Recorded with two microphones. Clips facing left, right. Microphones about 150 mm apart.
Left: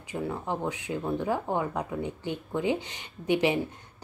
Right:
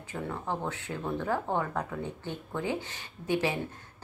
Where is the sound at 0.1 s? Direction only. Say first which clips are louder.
Left 3 dB; 15° left (ahead or behind).